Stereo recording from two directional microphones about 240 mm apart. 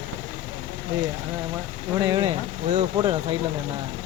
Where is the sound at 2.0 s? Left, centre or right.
Centre.